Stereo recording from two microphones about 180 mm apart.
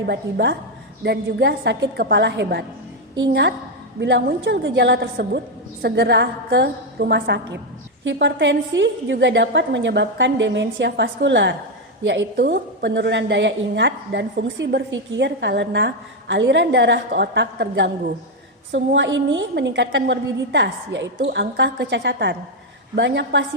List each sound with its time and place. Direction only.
0.1 s a woman's voice: 65° right (ahead or behind)
8.0 s a woman's voice: 80° right
18.7 s a woman's voice: 85° right
21.2 s a woman's voice: 70° right (ahead or behind)